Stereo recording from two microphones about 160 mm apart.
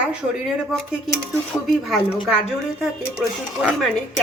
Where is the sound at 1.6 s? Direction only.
Centre (ahead or behind).